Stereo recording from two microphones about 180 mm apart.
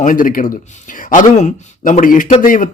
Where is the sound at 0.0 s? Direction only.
50° left (ahead or behind).